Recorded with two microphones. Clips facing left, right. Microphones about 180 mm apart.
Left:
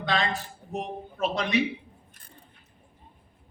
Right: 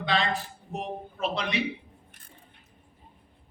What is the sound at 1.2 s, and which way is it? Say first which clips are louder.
Speech: left 4 dB; 45° left (ahead or behind).